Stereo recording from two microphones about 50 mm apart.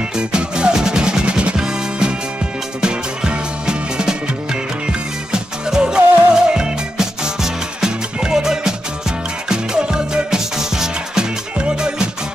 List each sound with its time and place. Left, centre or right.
0.2 s music: centre
5.3 s music: centre